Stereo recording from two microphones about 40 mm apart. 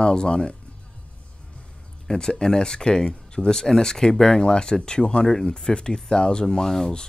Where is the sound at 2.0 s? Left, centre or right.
Centre.